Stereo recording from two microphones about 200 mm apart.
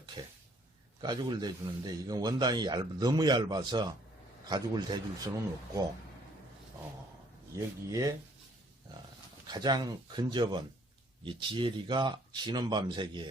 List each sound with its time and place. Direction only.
1.0 s a man's voice: 20° right (ahead or behind)
7.5 s speech: 15° right (ahead or behind)
9.5 s a man's voice: 20° right (ahead or behind)